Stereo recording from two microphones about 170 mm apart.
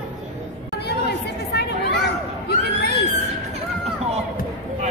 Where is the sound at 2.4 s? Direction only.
75° left (ahead or behind).